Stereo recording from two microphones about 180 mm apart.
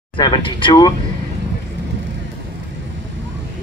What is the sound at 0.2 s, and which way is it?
Speech, 25° left (ahead or behind).